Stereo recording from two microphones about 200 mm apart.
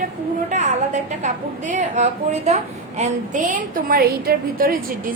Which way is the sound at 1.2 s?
35° right (ahead or behind).